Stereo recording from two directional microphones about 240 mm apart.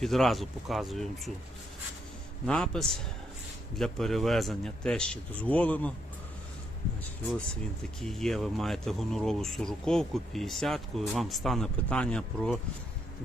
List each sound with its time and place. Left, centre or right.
0.0 s speech: centre
2.5 s speech: centre
8.0 s speech: centre